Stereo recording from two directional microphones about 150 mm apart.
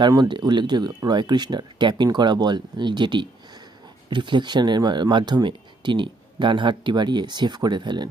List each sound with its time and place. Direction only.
0.0 s speech: 30° right (ahead or behind)